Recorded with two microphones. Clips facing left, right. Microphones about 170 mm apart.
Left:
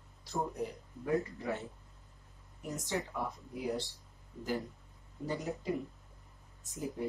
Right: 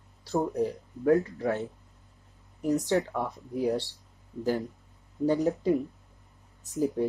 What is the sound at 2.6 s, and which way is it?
Speech, 65° right (ahead or behind).